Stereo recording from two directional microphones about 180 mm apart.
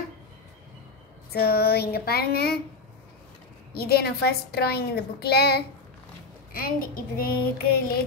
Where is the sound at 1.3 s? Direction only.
60° left (ahead or behind).